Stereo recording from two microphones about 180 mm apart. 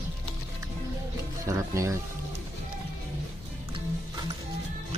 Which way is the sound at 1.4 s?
15° right (ahead or behind).